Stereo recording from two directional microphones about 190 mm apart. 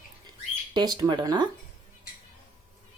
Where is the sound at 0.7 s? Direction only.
20° right (ahead or behind).